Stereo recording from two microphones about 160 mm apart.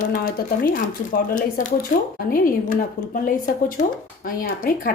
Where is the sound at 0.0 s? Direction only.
60° left (ahead or behind).